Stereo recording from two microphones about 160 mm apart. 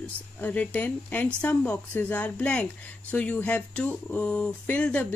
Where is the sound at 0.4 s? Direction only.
10° left (ahead or behind).